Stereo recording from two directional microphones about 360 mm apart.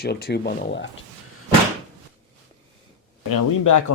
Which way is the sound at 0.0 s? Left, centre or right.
Left.